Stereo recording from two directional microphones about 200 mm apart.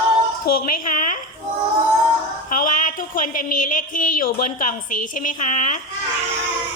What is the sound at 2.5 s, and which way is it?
A woman's voice, 40° left (ahead or behind).